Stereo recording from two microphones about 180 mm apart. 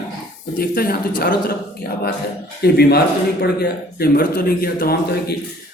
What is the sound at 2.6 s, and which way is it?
A man's voice, 60° left (ahead or behind).